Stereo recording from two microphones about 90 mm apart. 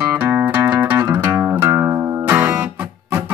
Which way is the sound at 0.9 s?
35° right (ahead or behind).